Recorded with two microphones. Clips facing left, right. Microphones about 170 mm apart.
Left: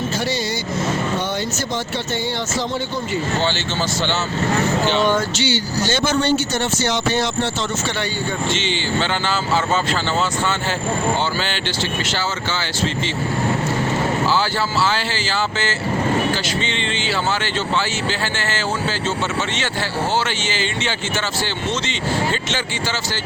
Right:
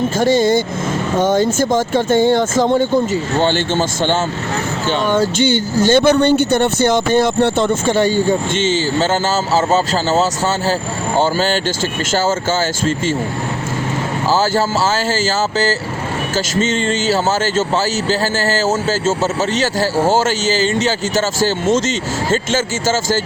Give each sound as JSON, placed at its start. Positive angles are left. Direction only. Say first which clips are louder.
{"t": 0.2, "sound": "speech", "louder": "right 10 dB", "side_deg": -50}
{"t": 5.2, "sound": "speech", "louder": "right 7 dB", "side_deg": -50}
{"t": 14.3, "sound": "speech", "louder": "right 5 dB", "side_deg": -45}
{"t": 20.1, "sound": "a man's voice", "louder": "right 7 dB", "side_deg": -40}
{"t": 22.3, "sound": "speech", "louder": "right 7 dB", "side_deg": -45}